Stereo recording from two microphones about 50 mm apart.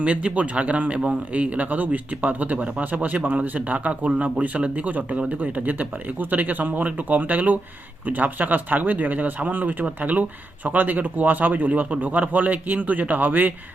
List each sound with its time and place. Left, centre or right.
0.0 s a man's voice: right